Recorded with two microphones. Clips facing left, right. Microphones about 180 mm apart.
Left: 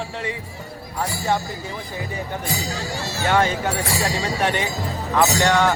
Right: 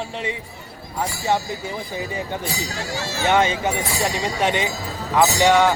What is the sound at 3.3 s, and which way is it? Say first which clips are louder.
Speech: right 1 dB; 20° right (ahead or behind).